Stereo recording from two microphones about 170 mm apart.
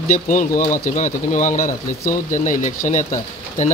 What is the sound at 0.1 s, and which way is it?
Speech, 50° left (ahead or behind).